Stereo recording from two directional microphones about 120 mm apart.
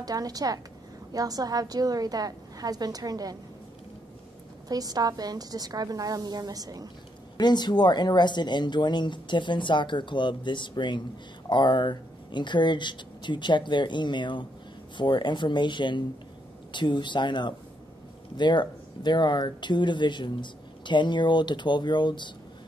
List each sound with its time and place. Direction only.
0.0 s a woman's voice: 30° right (ahead or behind)
4.6 s a woman's voice: 30° right (ahead or behind)
7.3 s speech: 35° left (ahead or behind)